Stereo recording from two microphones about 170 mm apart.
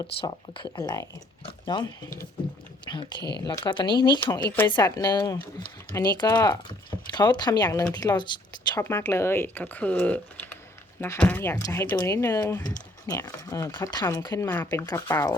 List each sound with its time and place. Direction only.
0.0 s speech: 25° left (ahead or behind)